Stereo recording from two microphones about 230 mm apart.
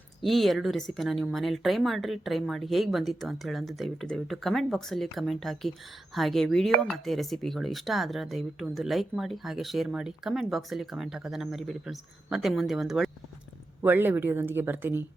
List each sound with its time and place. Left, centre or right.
0.2 s speech: centre